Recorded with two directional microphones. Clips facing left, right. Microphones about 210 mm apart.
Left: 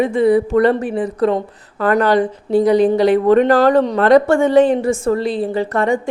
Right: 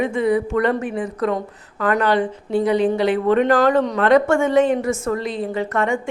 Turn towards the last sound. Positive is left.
turn(degrees=35)  # may be behind; listen again after turning